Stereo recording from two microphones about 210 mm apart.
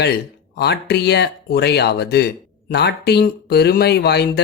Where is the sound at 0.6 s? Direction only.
50° left (ahead or behind).